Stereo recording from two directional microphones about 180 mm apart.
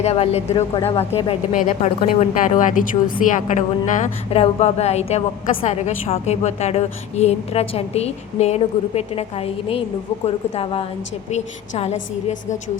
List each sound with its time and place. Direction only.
0.0 s a woman's voice: 35° left (ahead or behind)